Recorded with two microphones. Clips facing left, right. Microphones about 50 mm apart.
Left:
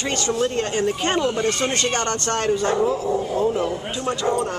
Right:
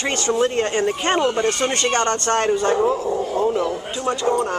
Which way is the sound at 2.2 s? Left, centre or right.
Centre.